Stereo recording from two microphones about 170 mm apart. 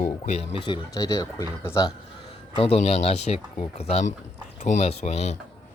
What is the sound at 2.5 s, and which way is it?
Speech, 35° left (ahead or behind).